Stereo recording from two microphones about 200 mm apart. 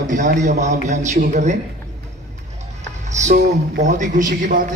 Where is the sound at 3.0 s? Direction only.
35° right (ahead or behind).